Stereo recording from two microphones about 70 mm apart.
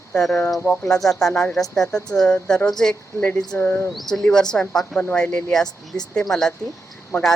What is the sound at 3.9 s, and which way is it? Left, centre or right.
Speech, centre.